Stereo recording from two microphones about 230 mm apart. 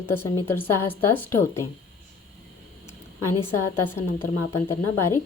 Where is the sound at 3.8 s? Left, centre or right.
Centre.